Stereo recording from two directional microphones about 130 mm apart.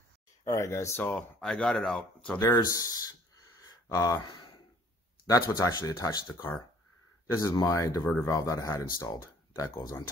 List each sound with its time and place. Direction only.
0.5 s speech: 25° left (ahead or behind); by 2.3 s 5° left (ahead or behind)
2.3 s speech: 25° left (ahead or behind)